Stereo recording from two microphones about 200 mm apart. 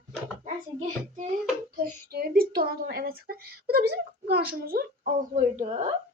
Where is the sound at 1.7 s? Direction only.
50° right (ahead or behind); by 5.9 s 30° right (ahead or behind).